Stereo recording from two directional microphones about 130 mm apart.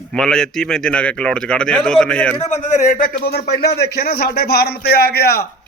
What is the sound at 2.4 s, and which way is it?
Speech, 65° left (ahead or behind).